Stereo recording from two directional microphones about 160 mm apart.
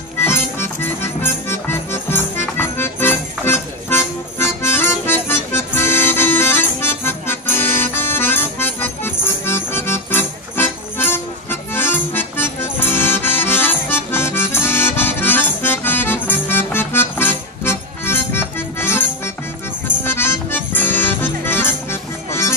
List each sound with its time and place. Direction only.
0.2 s music: 15° left (ahead or behind)